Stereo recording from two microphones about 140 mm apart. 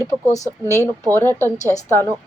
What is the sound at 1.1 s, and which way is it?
Speech, 15° left (ahead or behind).